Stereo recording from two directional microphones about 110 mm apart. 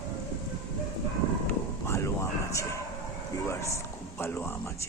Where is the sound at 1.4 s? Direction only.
25° left (ahead or behind).